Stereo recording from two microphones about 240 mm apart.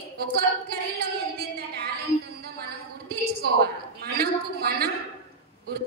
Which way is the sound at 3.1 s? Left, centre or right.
Right.